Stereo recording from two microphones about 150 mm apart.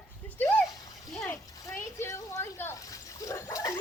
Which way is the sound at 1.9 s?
20° left (ahead or behind).